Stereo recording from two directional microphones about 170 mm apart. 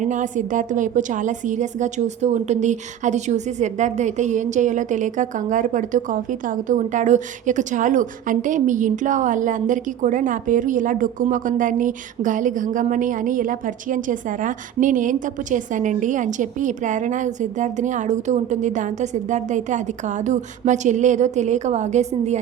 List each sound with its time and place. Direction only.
0.0 s a woman's voice: 45° right (ahead or behind)